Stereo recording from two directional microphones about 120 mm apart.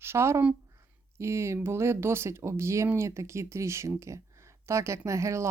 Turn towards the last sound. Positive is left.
turn(degrees=-25)  # may be behind; listen again after turning